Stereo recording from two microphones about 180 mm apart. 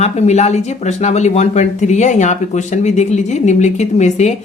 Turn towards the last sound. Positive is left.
turn(degrees=40)  # may be behind; listen again after turning